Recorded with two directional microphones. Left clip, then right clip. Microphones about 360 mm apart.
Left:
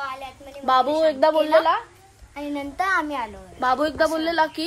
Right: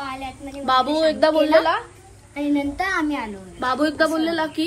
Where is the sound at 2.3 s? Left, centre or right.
Left.